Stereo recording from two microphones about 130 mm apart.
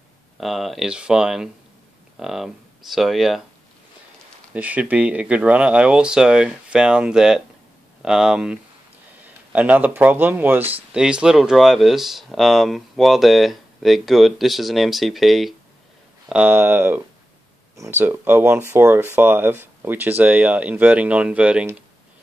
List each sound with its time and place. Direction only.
0.4 s speech: centre (ahead or behind)
4.6 s speech: 10° right (ahead or behind)